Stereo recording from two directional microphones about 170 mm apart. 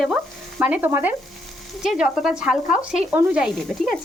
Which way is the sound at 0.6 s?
10° right (ahead or behind).